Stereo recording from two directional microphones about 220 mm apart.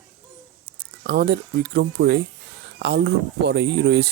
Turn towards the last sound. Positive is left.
turn(degrees=-50)  # may be behind; listen again after turning